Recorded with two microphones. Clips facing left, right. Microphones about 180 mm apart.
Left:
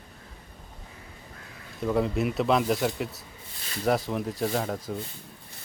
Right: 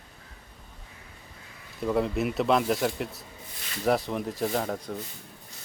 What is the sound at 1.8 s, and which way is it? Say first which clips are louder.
Speech: left 1 dB; centre (ahead or behind).